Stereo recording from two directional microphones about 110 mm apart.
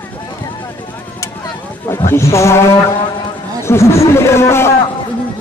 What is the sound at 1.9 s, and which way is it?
A man's voice, 25° left (ahead or behind).